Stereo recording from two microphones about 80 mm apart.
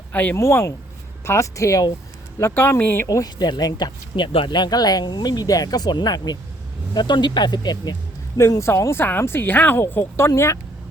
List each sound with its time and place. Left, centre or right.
0.1 s speech: left
0.3 s speech: left
2.4 s speech: left
3.1 s speech: left
8.4 s speech: left